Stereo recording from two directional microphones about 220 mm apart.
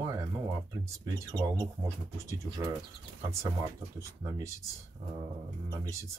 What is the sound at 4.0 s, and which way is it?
Speech, 15° right (ahead or behind).